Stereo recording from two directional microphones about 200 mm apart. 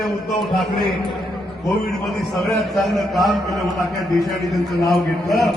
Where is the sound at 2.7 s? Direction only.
Centre (ahead or behind).